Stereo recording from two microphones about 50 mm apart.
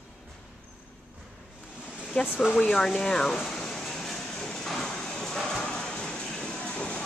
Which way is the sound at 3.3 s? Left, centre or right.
Centre.